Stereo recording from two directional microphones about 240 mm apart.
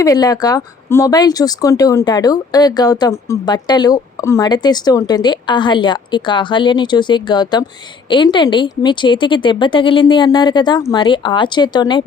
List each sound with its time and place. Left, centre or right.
0.0 s speech: centre